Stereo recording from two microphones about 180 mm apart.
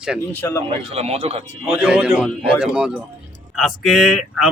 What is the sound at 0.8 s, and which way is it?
Speech, 35° right (ahead or behind).